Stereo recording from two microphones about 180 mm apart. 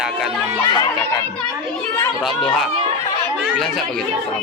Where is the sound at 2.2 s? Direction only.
Centre (ahead or behind).